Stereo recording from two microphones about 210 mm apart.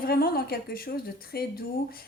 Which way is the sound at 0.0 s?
45° left (ahead or behind).